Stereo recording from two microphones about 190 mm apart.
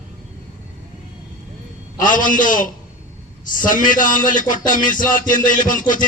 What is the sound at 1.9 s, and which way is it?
A man's voice, 45° left (ahead or behind).